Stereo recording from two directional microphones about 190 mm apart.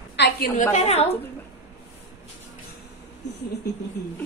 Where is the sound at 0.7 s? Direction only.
35° left (ahead or behind).